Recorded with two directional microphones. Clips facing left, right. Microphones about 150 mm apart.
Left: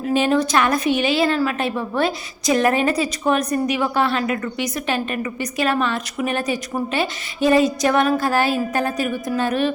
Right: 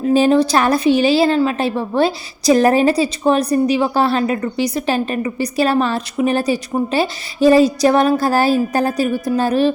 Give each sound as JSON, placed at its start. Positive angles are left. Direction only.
{"t": 0.0, "sound": "a woman's voice", "side_deg": -35}